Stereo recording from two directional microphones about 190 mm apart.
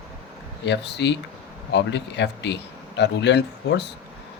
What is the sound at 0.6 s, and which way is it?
Speech, 65° left (ahead or behind).